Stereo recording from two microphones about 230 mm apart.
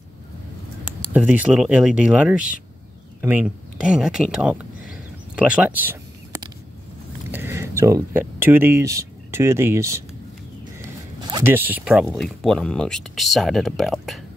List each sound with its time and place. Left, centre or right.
1.1 s speech: centre
5.3 s a sound: centre
7.2 s speech: centre
11.1 s speech: centre